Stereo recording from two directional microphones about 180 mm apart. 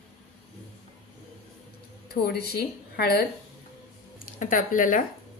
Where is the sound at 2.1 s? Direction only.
60° left (ahead or behind).